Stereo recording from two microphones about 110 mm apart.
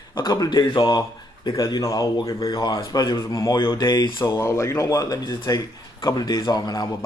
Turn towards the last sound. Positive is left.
turn(degrees=40)  # may be behind; listen again after turning